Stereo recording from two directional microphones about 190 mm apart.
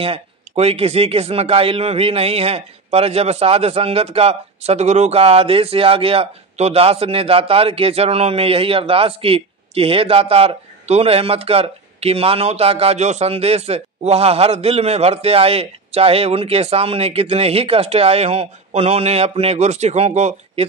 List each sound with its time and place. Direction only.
0.0 s speech: 30° right (ahead or behind)